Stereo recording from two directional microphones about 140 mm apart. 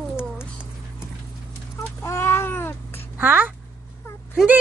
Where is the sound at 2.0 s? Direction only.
20° left (ahead or behind).